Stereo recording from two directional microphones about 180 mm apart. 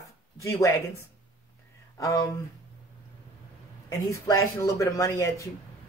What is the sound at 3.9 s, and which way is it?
Speech, 20° left (ahead or behind).